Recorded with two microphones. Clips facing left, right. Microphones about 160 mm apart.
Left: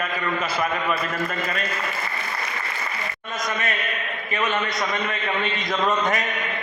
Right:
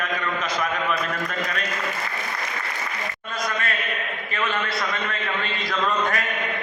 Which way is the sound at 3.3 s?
20° left (ahead or behind).